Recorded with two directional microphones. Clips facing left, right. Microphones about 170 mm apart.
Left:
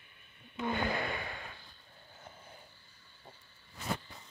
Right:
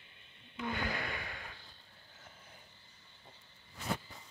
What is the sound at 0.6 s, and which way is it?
Gasp, 25° left (ahead or behind).